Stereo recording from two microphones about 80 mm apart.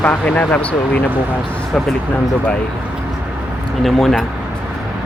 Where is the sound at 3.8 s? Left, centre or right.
Centre.